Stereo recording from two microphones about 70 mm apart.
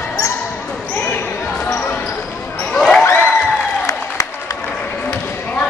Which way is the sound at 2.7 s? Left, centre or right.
Centre.